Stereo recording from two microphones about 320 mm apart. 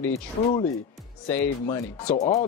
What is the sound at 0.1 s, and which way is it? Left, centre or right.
Speech, centre.